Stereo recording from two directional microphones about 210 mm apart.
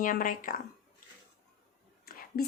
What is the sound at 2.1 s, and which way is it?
Whispering, 45° left (ahead or behind).